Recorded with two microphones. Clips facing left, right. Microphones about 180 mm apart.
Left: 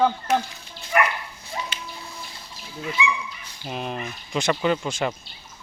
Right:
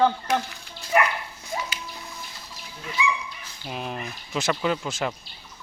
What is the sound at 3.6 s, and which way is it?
Speech, centre (ahead or behind).